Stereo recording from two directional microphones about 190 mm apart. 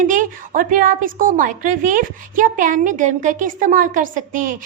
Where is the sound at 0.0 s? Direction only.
45° right (ahead or behind).